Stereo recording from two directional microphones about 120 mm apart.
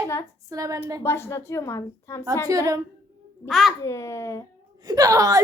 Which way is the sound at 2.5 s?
30° right (ahead or behind).